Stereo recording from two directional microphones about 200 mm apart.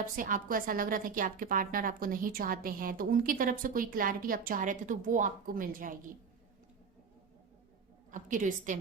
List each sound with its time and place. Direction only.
0.2 s a woman's voice: 40° right (ahead or behind)
8.1 s a woman's voice: 40° right (ahead or behind)